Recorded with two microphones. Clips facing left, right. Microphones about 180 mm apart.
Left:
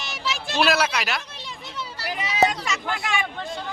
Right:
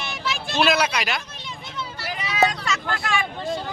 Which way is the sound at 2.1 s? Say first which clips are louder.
Left 1 dB; 20° left (ahead or behind).